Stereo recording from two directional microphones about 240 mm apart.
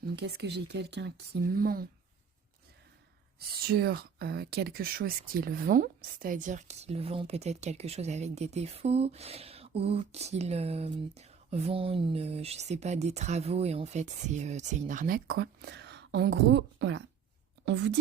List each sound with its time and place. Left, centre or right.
0.0 s speech: right
3.3 s speech: right